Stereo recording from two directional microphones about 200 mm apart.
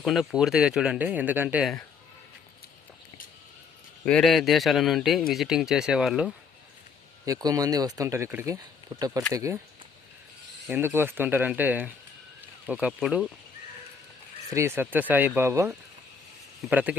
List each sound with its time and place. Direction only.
0.0 s speech: centre (ahead or behind)
4.0 s speech: 5° left (ahead or behind)
7.3 s speech: 20° right (ahead or behind)
10.7 s speech: 10° right (ahead or behind)
14.5 s speech: 10° right (ahead or behind)